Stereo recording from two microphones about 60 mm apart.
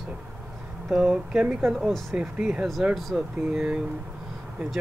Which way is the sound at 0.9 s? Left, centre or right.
Centre.